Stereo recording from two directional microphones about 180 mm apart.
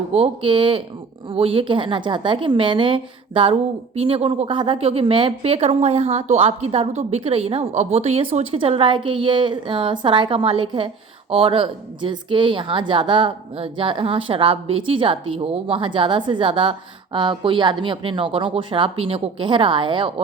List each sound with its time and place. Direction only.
0.1 s a woman's voice: 30° right (ahead or behind)